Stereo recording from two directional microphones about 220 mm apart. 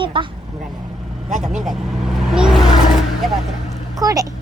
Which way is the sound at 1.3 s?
Centre (ahead or behind).